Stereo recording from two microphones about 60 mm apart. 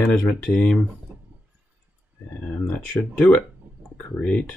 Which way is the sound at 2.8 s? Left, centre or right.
Left.